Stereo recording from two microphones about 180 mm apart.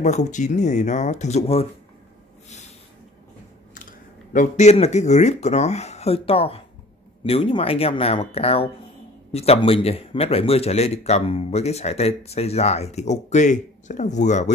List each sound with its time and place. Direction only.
0.0 s speech: 40° left (ahead or behind)
3.7 s speech: 45° left (ahead or behind)